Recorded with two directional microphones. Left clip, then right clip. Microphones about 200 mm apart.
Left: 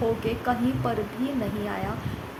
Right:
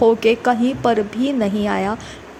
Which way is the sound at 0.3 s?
40° right (ahead or behind).